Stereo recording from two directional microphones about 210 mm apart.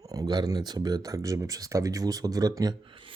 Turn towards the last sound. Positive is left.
turn(degrees=-25)  # may be behind; listen again after turning